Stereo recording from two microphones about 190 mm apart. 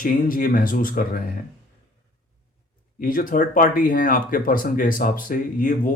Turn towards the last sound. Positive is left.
turn(degrees=45)  # may be behind; listen again after turning